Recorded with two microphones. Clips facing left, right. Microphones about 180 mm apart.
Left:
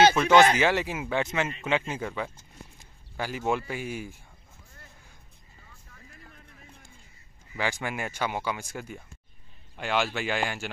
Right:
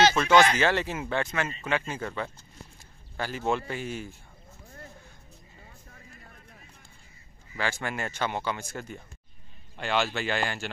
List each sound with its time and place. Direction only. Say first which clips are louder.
0.1 s speech: left 2 dB; 15° left (ahead or behind)
7.5 s speech: left 1 dB; 15° left (ahead or behind)